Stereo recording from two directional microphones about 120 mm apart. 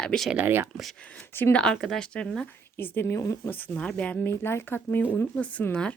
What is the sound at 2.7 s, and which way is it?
Speech, 20° left (ahead or behind).